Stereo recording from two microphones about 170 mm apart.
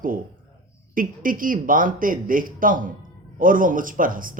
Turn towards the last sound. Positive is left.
turn(degrees=-55)  # may be behind; listen again after turning